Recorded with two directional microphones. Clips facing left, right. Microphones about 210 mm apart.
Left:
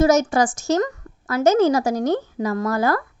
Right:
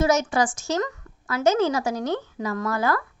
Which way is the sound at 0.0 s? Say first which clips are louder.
Left 5 dB; 40° left (ahead or behind).